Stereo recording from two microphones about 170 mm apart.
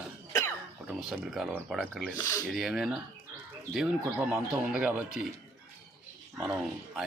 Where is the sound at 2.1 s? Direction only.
20° left (ahead or behind).